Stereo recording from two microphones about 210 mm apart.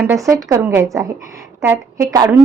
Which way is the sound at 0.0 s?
15° right (ahead or behind).